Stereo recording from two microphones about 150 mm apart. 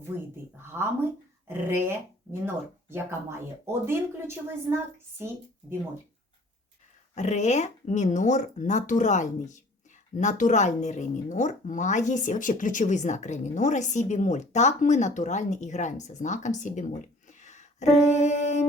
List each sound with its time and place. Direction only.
0.6 s a sound: 15° right (ahead or behind)
1.5 s speech: 15° right (ahead or behind)
7.2 s speech: 50° left (ahead or behind)